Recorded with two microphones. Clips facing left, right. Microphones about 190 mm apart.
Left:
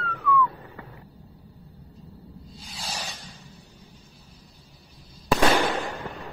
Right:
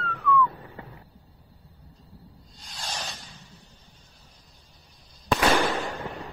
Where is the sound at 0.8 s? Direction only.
25° right (ahead or behind).